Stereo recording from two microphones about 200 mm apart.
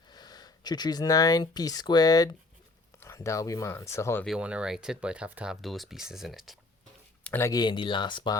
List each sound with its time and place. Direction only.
0.1 s speech: 20° left (ahead or behind)
4.3 s speech: 5° right (ahead or behind)
7.3 s speech: 10° left (ahead or behind)